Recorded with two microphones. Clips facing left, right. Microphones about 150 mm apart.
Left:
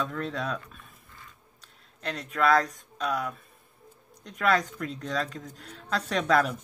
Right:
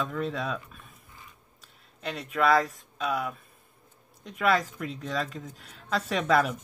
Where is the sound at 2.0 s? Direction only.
Centre (ahead or behind).